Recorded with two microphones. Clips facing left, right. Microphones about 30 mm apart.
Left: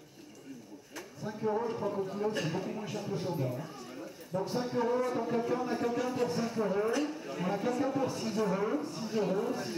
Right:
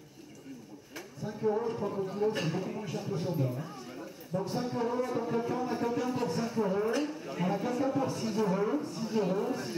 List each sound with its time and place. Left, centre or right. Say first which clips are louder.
1.2 s speech: right 2 dB; centre